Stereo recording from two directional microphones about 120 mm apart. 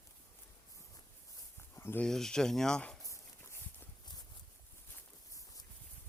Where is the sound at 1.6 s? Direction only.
20° left (ahead or behind).